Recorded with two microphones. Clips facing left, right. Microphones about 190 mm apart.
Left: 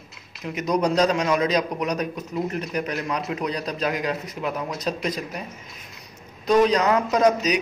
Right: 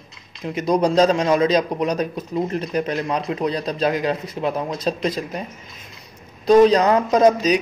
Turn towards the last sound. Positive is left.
turn(degrees=-30)  # may be behind; listen again after turning